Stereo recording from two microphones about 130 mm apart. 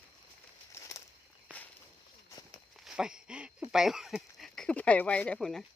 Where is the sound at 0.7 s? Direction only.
20° left (ahead or behind).